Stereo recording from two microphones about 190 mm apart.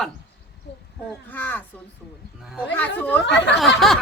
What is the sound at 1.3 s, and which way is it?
Speech, 10° left (ahead or behind).